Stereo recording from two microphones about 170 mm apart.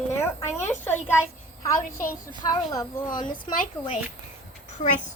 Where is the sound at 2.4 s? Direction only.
25° left (ahead or behind).